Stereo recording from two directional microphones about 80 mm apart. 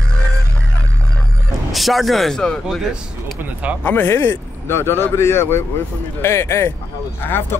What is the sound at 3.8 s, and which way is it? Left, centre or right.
Speech, left.